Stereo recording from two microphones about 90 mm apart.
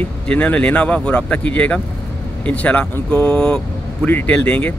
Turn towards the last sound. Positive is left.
turn(degrees=20)  # may be behind; listen again after turning